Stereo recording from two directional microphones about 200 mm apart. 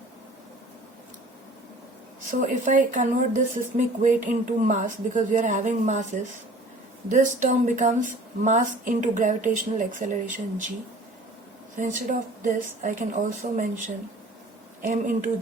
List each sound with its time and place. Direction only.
2.4 s speech: 40° right (ahead or behind)
11.8 s speech: 40° right (ahead or behind)